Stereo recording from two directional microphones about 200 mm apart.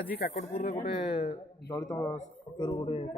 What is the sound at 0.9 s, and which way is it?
Speech, 30° left (ahead or behind).